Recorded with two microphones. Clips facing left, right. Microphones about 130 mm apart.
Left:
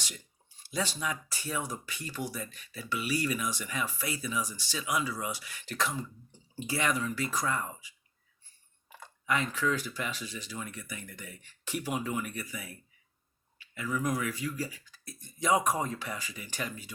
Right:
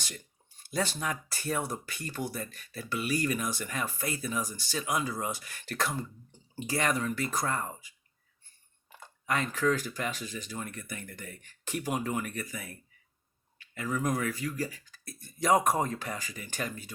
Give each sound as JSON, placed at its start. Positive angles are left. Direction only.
{"t": 0.6, "sound": "speech", "side_deg": -50}
{"t": 9.2, "sound": "speech", "side_deg": -45}